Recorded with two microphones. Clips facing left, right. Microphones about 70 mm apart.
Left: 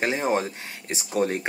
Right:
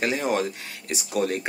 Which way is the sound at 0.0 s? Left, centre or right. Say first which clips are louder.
Even; left.